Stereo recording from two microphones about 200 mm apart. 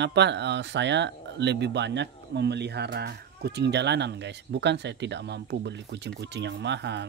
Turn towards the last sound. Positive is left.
turn(degrees=-60)  # may be behind; listen again after turning